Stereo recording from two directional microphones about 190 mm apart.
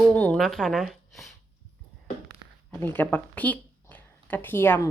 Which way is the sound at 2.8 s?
10° left (ahead or behind).